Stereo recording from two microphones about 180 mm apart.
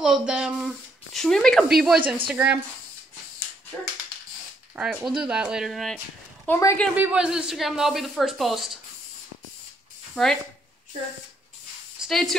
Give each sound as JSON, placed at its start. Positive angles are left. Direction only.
{"t": 0.0, "sound": "speech", "side_deg": -5}
{"t": 4.7, "sound": "speech", "side_deg": -5}
{"t": 6.4, "sound": "a woman's voice", "side_deg": 15}
{"t": 7.0, "sound": "speech", "side_deg": -5}
{"t": 10.2, "sound": "speech", "side_deg": 5}
{"t": 12.0, "sound": "speech", "side_deg": 0}